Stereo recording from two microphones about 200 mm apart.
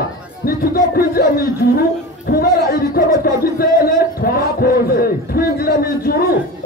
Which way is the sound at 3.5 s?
50° left (ahead or behind).